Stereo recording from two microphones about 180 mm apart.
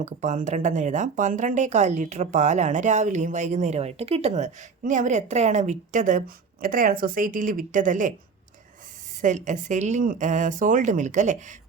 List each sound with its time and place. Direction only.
0.0 s speech: 40° right (ahead or behind)
9.2 s speech: 40° right (ahead or behind)